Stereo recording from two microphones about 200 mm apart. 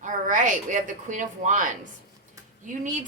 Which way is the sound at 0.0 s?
40° right (ahead or behind).